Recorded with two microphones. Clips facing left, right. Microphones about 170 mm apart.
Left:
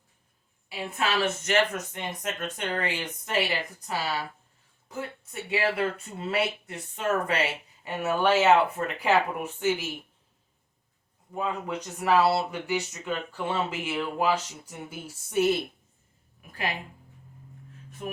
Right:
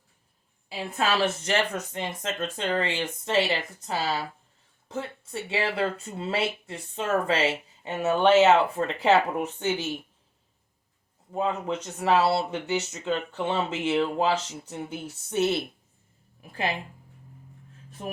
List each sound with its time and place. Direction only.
0.7 s speech: 30° right (ahead or behind)
11.3 s speech: 25° right (ahead or behind)
16.4 s speech: 30° right (ahead or behind)